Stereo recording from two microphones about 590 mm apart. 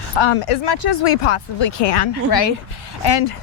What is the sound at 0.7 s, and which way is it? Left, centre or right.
Speech, left.